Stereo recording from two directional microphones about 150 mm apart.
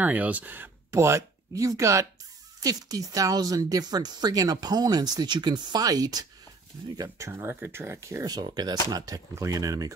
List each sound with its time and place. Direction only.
0.0 s speech: 10° right (ahead or behind)